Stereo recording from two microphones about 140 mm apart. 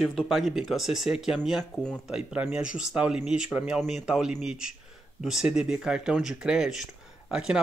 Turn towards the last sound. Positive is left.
turn(degrees=-5)  # may be behind; listen again after turning